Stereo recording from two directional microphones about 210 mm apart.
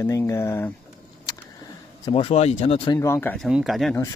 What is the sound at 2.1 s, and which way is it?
Speech, 30° left (ahead or behind).